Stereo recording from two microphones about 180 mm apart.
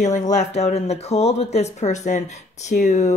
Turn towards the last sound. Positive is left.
turn(degrees=40)  # may be behind; listen again after turning